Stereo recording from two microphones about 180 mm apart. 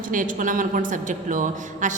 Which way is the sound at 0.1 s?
45° right (ahead or behind).